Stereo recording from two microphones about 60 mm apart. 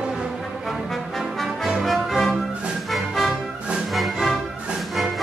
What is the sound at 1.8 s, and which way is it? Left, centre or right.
Music, centre.